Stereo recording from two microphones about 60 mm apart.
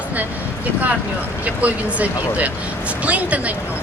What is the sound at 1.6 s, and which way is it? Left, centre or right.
Speech, right.